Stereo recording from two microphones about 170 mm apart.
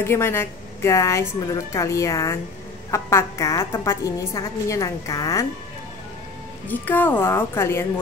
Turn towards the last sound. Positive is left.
turn(degrees=15)  # may be behind; listen again after turning